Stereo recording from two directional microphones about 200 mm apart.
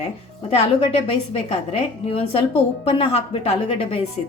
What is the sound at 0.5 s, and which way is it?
A woman's voice, 30° left (ahead or behind).